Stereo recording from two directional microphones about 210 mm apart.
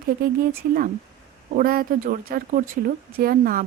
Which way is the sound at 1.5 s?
45° right (ahead or behind).